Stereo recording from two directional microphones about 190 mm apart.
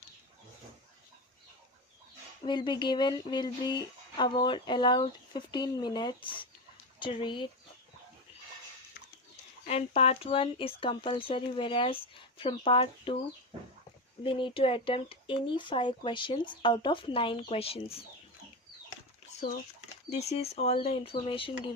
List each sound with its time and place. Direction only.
2.4 s speech: 25° left (ahead or behind)
9.6 s speech: 35° left (ahead or behind)
14.3 s speech: 25° left (ahead or behind)
20.1 s speech: 35° left (ahead or behind)